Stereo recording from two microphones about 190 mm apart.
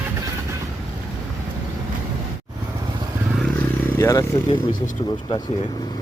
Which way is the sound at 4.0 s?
15° left (ahead or behind).